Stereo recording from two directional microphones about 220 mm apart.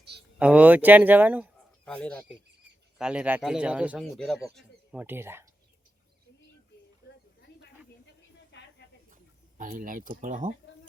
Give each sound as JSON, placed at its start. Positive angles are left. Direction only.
{"t": 0.3, "sound": "speech", "side_deg": -5}
{"t": 1.8, "sound": "speech", "side_deg": 5}
{"t": 7.1, "sound": "a sound", "side_deg": 50}
{"t": 9.6, "sound": "speech", "side_deg": -40}